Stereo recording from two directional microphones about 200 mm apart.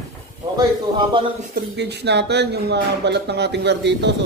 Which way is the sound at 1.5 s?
60° right (ahead or behind).